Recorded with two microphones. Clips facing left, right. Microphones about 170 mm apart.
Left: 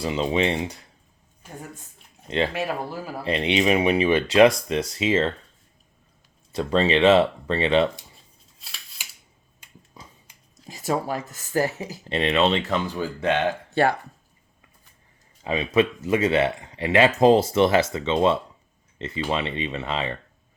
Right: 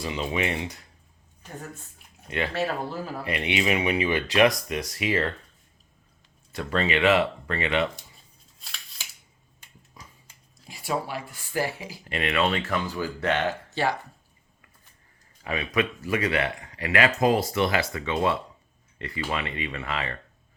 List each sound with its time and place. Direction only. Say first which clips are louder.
0.0 s speech: left 5 dB; 25° left (ahead or behind)
1.4 s speech: even; 15° left (ahead or behind)
2.2 s speech: left 5 dB; 25° left (ahead or behind)
2.5 s speech: even; 10° left (ahead or behind)
3.2 s speech: left 6 dB; 25° left (ahead or behind)
6.6 s speech: left 5 dB; 25° left (ahead or behind)
10.7 s speech: left 4 dB; 45° left (ahead or behind)
12.0 s speech: left 4 dB; 25° left (ahead or behind)
13.7 s a sound: left 9 dB; 55° left (ahead or behind)
15.4 s speech: left 6 dB; 25° left (ahead or behind)